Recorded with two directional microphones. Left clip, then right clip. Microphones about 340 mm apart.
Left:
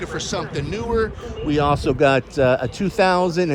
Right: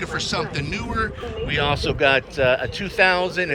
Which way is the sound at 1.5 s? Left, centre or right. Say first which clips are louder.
Left 3 dB; centre.